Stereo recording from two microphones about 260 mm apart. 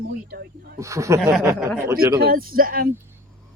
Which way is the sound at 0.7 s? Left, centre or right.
Centre.